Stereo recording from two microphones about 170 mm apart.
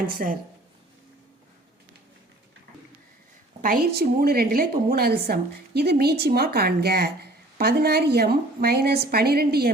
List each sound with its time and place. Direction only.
0.1 s a woman's voice: 55° right (ahead or behind)
3.6 s a woman's voice: 55° right (ahead or behind)